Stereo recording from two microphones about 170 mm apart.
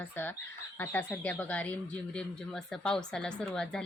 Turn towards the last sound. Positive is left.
turn(degrees=5)  # may be behind; listen again after turning